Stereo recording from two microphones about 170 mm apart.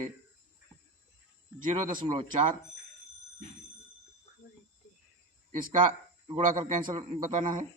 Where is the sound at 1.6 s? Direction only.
50° right (ahead or behind).